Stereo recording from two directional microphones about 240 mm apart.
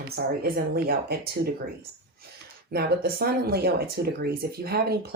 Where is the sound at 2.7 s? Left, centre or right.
Right.